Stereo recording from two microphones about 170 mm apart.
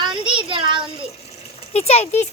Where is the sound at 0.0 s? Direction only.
30° right (ahead or behind).